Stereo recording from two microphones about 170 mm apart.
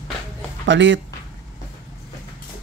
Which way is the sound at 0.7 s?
90° right.